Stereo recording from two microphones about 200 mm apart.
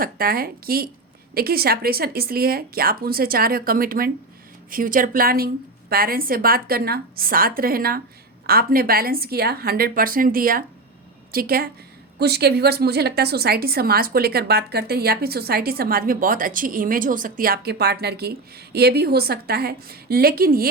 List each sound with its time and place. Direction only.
0.0 s a woman's voice: 50° right (ahead or behind)